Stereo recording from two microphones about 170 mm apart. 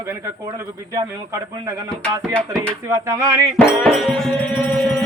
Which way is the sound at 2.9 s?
15° right (ahead or behind).